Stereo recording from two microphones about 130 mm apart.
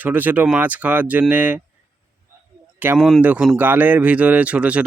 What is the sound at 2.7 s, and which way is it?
Speech, 15° right (ahead or behind).